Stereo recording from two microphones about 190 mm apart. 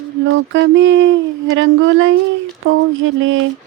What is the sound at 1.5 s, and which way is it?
Speech, 90° right.